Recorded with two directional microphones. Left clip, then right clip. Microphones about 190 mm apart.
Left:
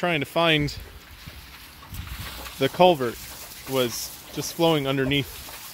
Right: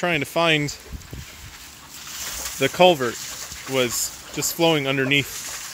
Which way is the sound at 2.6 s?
5° left (ahead or behind).